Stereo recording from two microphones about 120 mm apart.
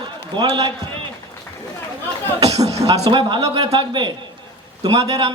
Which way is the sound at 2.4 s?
30° right (ahead or behind).